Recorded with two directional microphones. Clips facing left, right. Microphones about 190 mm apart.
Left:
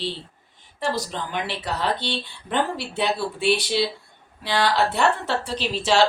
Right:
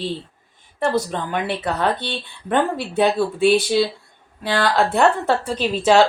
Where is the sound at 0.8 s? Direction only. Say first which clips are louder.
Right 6 dB; 55° right (ahead or behind).